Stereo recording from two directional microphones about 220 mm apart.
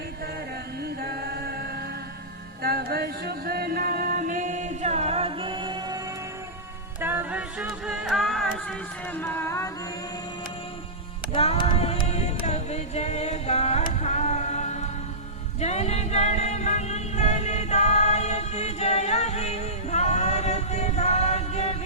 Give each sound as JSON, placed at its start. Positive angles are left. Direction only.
{"t": 0.9, "sound": "chant", "side_deg": -45}
{"t": 2.6, "sound": "music", "side_deg": -45}
{"t": 7.0, "sound": "a sound", "side_deg": -10}
{"t": 11.3, "sound": "singing", "side_deg": 25}
{"t": 15.6, "sound": "music", "side_deg": 30}